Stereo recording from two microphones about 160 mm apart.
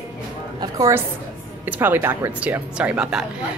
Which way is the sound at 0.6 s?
20° right (ahead or behind).